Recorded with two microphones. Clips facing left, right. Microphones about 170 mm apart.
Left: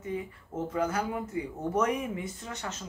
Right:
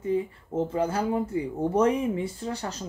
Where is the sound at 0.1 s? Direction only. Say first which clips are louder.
Right 7 dB; 30° right (ahead or behind).